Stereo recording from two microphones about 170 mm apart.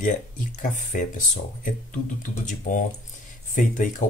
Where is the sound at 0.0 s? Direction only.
50° left (ahead or behind).